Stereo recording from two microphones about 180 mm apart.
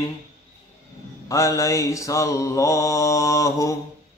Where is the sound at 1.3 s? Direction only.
20° left (ahead or behind).